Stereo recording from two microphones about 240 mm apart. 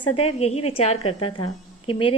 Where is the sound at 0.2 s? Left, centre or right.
Left.